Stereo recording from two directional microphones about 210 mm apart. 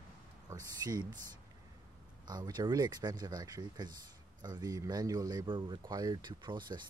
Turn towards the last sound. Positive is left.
turn(degrees=-20)  # may be behind; listen again after turning